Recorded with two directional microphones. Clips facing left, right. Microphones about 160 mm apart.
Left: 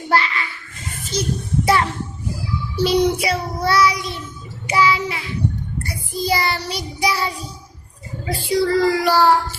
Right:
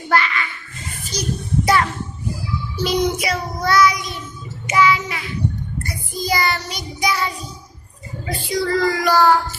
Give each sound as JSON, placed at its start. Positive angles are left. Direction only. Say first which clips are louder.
{"t": 0.1, "sound": "child singing", "louder": "even", "side_deg": 30}